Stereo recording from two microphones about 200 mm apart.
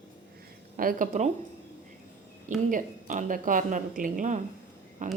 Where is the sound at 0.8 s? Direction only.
45° right (ahead or behind).